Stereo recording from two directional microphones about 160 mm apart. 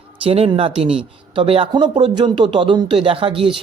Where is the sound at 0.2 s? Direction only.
35° right (ahead or behind).